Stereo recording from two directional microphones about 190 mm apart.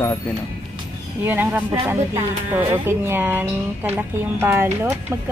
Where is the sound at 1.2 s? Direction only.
10° right (ahead or behind).